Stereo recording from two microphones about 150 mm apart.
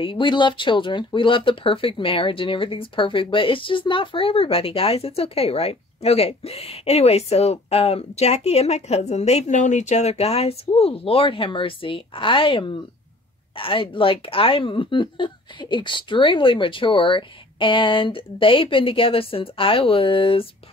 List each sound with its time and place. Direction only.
0.0 s speech: 35° left (ahead or behind)